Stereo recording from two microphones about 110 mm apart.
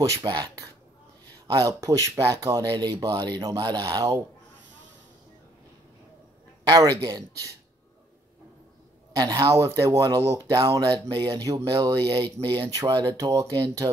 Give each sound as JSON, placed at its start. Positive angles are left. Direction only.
{"t": 0.1, "sound": "speech", "side_deg": -35}
{"t": 6.6, "sound": "speech", "side_deg": -35}
{"t": 9.1, "sound": "speech", "side_deg": -35}